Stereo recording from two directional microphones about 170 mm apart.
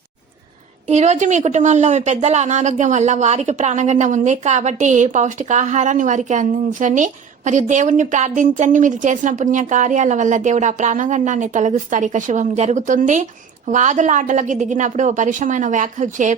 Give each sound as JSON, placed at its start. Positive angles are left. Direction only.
{"t": 0.9, "sound": "a woman's voice", "side_deg": -40}